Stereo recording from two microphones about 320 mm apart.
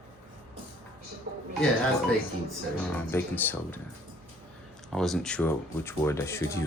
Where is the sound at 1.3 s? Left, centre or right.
Right.